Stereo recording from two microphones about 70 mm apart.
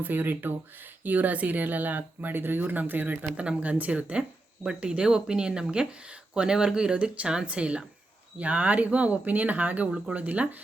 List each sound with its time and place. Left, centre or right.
0.0 s speech: right